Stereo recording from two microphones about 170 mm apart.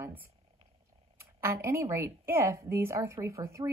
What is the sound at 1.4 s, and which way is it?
A woman's voice, 15° right (ahead or behind).